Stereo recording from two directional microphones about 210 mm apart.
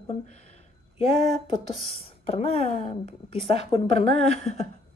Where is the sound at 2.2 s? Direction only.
30° left (ahead or behind).